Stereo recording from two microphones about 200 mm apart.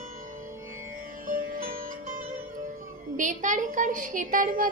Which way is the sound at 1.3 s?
45° right (ahead or behind).